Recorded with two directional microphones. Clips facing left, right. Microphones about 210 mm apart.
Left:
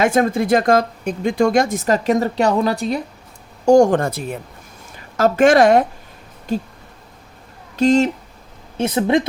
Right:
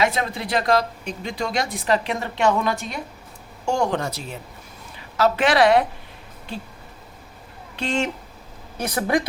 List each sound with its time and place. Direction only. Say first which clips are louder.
0.0 s speech: left 7 dB; 50° left (ahead or behind)
7.8 s speech: left 10 dB; 40° left (ahead or behind)
8.8 s speech: left 6 dB; 25° left (ahead or behind)